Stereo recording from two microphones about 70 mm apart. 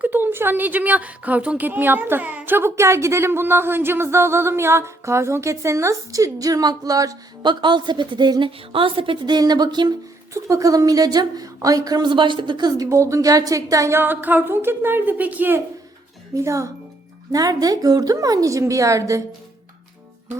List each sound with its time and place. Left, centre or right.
0.0 s a woman's voice: right
7.4 s a woman's voice: right
10.3 s speech: right
12.8 s speech: right
13.9 s a woman's voice: right
16.3 s speech: right
17.3 s speech: right